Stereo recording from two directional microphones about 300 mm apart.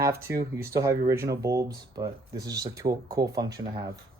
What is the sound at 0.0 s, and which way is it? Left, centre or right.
Speech, centre.